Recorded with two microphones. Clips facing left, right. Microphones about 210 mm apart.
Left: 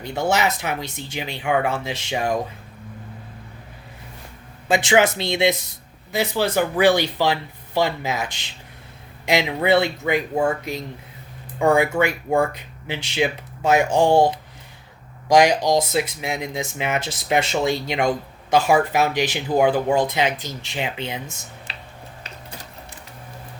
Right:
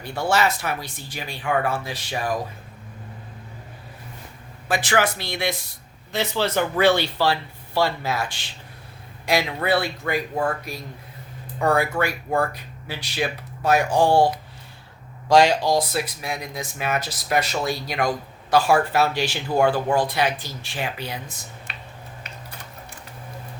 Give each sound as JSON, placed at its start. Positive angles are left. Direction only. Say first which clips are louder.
{"t": 0.0, "sound": "speech", "louder": "left 1 dB", "side_deg": 20}
{"t": 4.7, "sound": "speech", "louder": "left 5 dB", "side_deg": 25}
{"t": 6.1, "sound": "speech", "louder": "left 2 dB", "side_deg": 10}